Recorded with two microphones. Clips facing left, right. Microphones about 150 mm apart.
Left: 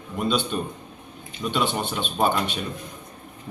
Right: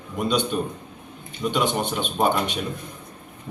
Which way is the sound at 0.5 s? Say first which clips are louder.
Right 2 dB; 5° right (ahead or behind).